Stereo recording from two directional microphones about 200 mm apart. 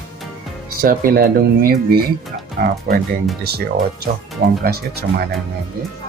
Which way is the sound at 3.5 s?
50° right (ahead or behind).